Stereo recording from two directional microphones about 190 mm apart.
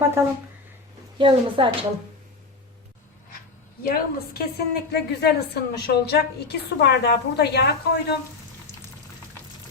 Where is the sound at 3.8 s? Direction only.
50° left (ahead or behind).